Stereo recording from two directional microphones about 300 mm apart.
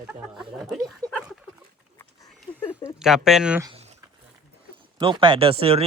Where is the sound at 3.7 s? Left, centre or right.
Right.